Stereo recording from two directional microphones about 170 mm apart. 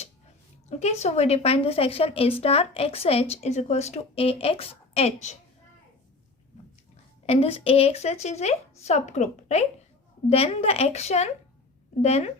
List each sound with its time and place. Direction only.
0.7 s a woman's voice: 40° left (ahead or behind)
7.3 s a woman's voice: 35° left (ahead or behind)